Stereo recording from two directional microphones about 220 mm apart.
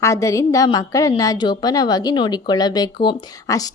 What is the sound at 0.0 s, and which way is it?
A woman's voice, 15° left (ahead or behind).